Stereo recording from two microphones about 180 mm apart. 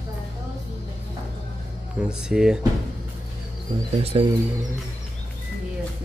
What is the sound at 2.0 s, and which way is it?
Speech, 5° right (ahead or behind).